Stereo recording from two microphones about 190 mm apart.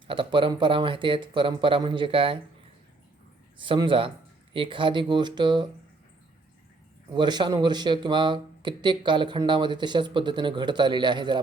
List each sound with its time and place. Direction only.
0.1 s speech: 25° right (ahead or behind)
3.6 s speech: 25° right (ahead or behind)
7.1 s speech: 20° right (ahead or behind)